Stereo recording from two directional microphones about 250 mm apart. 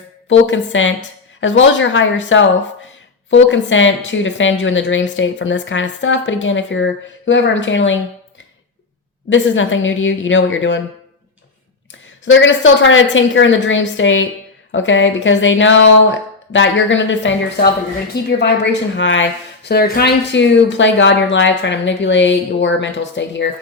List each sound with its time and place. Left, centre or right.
0.3 s a woman's voice: left
9.3 s a woman's voice: left
12.2 s a woman's voice: left